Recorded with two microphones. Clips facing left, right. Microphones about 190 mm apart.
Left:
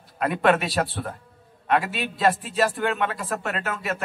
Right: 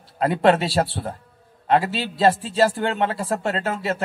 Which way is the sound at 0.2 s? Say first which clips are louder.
Right 3 dB; 30° right (ahead or behind).